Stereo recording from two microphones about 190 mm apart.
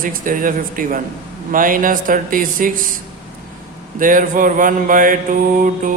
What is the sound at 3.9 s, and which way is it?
Mantra, 45° right (ahead or behind).